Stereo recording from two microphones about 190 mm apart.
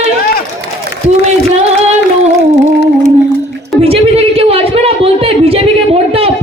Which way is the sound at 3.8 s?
30° right (ahead or behind).